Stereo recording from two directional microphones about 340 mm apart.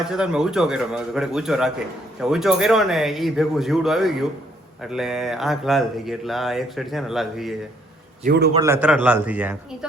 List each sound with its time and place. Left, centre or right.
0.0 s speech: centre
8.2 s a man's voice: right
8.5 s speech: centre